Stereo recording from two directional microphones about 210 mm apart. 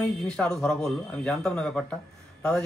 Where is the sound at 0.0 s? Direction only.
5° left (ahead or behind).